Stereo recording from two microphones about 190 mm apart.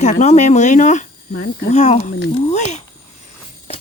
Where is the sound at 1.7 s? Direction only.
35° left (ahead or behind).